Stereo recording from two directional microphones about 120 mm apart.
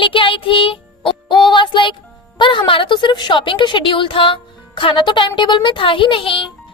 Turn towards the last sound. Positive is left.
turn(degrees=45)  # may be behind; listen again after turning